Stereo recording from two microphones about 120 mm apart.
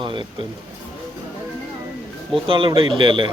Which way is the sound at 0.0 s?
45° right (ahead or behind).